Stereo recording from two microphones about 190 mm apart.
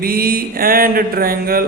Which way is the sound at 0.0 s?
50° right (ahead or behind).